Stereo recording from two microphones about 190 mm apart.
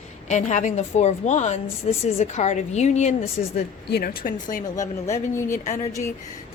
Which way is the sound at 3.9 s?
55° left (ahead or behind).